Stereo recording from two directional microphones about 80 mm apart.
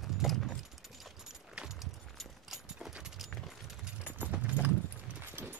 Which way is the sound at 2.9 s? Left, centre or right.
Centre.